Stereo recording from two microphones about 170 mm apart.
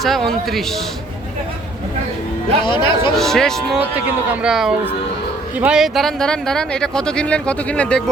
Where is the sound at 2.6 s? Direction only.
30° left (ahead or behind).